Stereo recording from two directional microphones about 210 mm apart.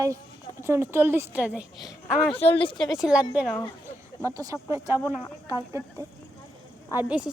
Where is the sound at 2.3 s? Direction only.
25° left (ahead or behind).